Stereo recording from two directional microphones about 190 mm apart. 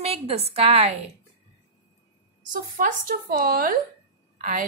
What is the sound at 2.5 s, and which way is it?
A woman's voice, 45° right (ahead or behind).